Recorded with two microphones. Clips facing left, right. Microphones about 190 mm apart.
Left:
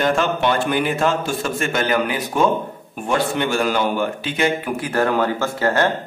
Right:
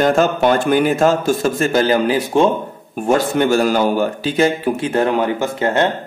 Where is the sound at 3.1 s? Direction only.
40° right (ahead or behind); by 5.8 s 20° right (ahead or behind).